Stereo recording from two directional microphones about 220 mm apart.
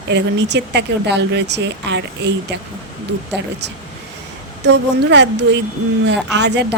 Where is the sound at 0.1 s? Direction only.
50° right (ahead or behind).